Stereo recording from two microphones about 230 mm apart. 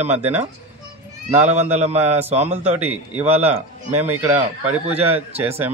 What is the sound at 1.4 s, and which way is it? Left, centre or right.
Speech, right.